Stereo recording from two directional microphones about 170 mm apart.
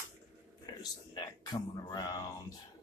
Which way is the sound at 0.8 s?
25° left (ahead or behind).